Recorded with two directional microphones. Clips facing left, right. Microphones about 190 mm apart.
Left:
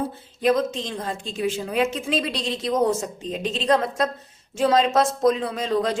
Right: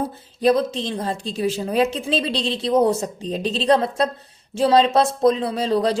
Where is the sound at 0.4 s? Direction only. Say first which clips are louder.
Right 3 dB; 30° right (ahead or behind).